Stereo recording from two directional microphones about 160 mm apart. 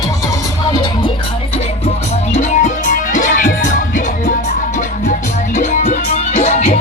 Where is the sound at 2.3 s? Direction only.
50° left (ahead or behind).